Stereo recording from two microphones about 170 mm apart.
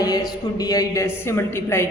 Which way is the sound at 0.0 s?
20° left (ahead or behind).